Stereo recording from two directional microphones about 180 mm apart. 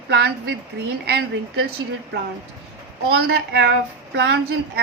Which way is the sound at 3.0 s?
65° right (ahead or behind).